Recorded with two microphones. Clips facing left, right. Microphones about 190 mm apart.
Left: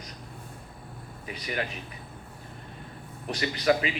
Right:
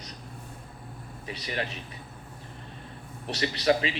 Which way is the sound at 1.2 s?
30° right (ahead or behind).